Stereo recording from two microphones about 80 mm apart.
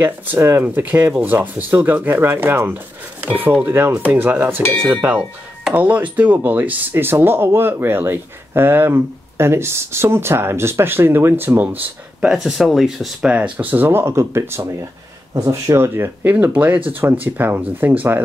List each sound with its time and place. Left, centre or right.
0.0 s speech: right
5.8 s speech: centre
12.2 s speech: centre; by 18.2 s right